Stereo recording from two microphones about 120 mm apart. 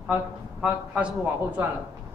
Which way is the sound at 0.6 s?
10° right (ahead or behind).